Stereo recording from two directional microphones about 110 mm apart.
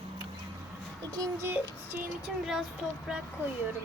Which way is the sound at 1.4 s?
20° right (ahead or behind).